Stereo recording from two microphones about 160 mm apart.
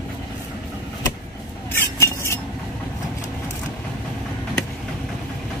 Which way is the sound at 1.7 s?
15° left (ahead or behind).